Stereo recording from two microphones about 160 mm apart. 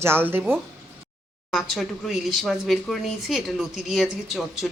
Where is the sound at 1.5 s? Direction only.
Centre (ahead or behind).